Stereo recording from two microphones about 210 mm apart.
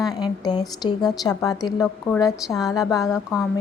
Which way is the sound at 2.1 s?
5° left (ahead or behind).